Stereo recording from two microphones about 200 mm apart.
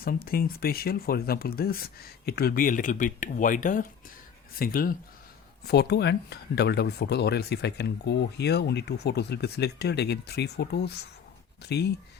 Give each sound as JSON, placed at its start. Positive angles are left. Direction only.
{"t": 0.0, "sound": "speech", "side_deg": 45}